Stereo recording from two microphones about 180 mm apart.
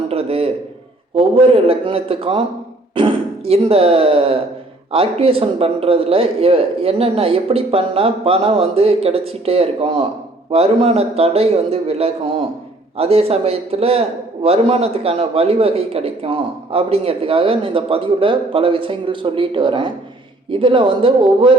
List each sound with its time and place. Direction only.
0.1 s a man's voice: 35° right (ahead or behind)